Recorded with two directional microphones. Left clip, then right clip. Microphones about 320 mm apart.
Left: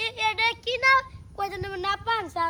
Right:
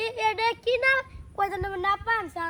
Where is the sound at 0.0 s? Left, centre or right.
Centre.